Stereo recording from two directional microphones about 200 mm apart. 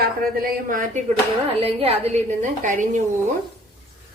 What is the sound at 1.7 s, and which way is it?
A woman's voice, 30° right (ahead or behind).